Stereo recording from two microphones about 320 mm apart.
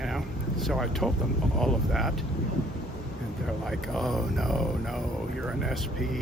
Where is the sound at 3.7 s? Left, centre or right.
Centre.